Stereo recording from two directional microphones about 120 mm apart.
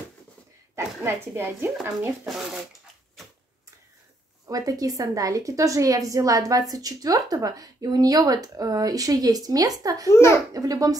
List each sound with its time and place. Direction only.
0.7 s speech: 20° right (ahead or behind)
2.2 s speech: centre (ahead or behind)
4.5 s a woman's voice: 30° right (ahead or behind)
10.1 s a child's voice: 20° left (ahead or behind)
10.5 s a woman's voice: 30° right (ahead or behind)